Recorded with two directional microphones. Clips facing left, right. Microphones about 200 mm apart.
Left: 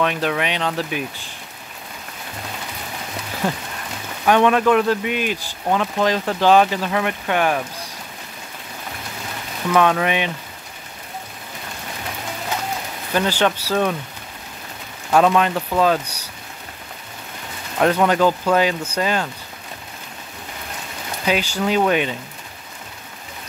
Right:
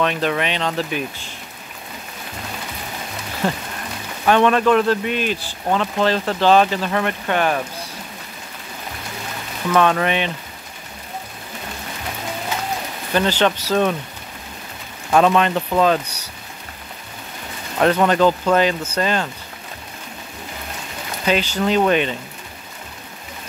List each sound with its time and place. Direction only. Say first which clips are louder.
0.0 s speech: right 1 dB; 10° left (ahead or behind)
4.3 s speech: even; 10° left (ahead or behind)
9.7 s speech: even; 5° left (ahead or behind)
13.1 s speech: right 1 dB; 10° left (ahead or behind)
15.0 s speech: right 1 dB; 5° left (ahead or behind)
17.7 s speech: right 1 dB; 10° left (ahead or behind)
21.3 s speech: right 1 dB; 10° left (ahead or behind)